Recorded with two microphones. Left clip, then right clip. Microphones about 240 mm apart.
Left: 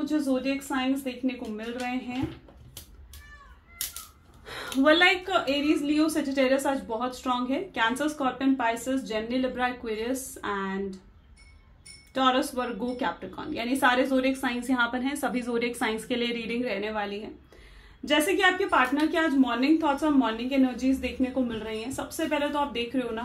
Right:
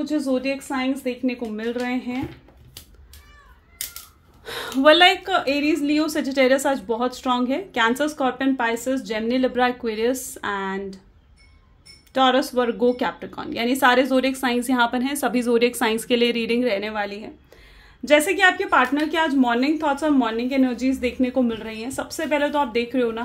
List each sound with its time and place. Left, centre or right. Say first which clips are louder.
0.7 s a woman's voice: right 4 dB; right
4.5 s a woman's voice: right 7 dB; right
12.1 s a woman's voice: right 6 dB; right